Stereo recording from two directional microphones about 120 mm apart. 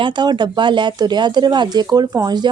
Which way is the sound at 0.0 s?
40° right (ahead or behind).